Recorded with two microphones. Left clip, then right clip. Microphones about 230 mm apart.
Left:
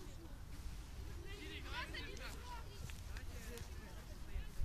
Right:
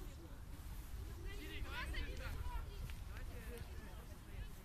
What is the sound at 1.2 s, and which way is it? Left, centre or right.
Vehicle, centre.